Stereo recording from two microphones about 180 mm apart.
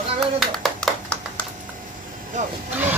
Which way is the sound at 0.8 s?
5° left (ahead or behind).